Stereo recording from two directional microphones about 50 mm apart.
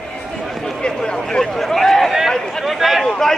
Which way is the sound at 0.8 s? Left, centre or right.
Centre.